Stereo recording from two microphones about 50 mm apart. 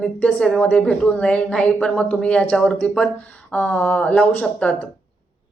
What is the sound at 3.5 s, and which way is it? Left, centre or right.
Speech, left.